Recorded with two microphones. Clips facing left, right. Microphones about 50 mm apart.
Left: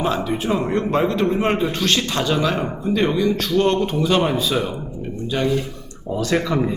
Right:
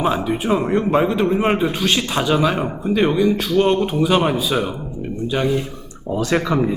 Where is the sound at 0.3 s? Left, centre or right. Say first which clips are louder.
Right 2 dB; centre.